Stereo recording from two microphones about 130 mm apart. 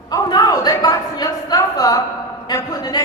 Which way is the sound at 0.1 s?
30° left (ahead or behind).